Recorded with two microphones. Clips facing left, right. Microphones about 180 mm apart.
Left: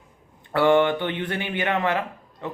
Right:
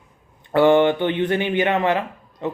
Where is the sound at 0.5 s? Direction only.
20° right (ahead or behind).